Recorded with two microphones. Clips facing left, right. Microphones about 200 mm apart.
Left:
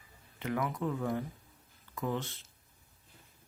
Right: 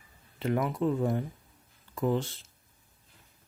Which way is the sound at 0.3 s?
30° right (ahead or behind).